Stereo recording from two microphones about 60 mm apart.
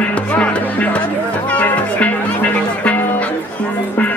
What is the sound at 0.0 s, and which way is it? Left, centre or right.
Music, left.